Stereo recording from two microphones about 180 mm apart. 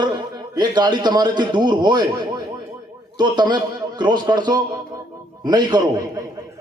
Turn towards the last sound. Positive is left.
turn(degrees=-25)  # may be behind; listen again after turning